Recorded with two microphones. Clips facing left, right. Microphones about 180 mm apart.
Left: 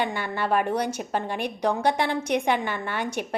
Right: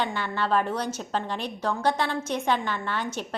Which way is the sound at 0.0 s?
15° left (ahead or behind).